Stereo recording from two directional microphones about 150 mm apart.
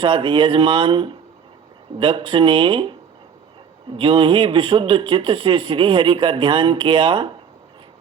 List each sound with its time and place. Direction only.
0.0 s speech: 35° right (ahead or behind)
3.9 s speech: 35° right (ahead or behind)